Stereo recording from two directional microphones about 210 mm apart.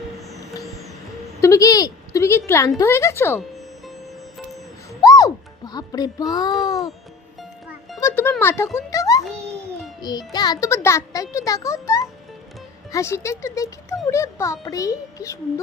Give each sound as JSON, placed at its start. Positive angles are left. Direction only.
{"t": 1.4, "sound": "a child's voice", "side_deg": 15}
{"t": 5.0, "sound": "music", "side_deg": 15}
{"t": 8.0, "sound": "music", "side_deg": 10}
{"t": 10.0, "sound": "a child's voice", "side_deg": 20}